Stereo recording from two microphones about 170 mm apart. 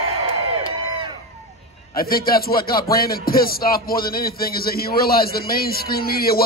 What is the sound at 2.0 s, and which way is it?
Speech, 60° left (ahead or behind).